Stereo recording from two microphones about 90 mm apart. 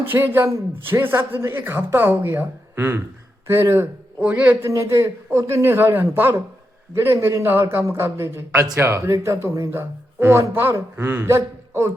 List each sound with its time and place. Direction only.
0.0 s speech: 25° right (ahead or behind)
4.7 s speech: 30° right (ahead or behind)